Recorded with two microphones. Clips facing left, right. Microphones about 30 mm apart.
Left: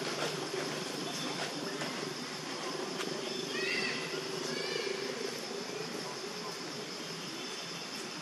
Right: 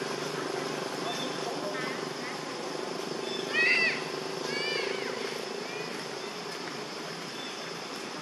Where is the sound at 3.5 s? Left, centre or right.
Right.